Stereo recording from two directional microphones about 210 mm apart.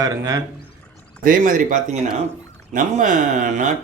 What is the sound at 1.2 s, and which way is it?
A man's voice, 40° right (ahead or behind).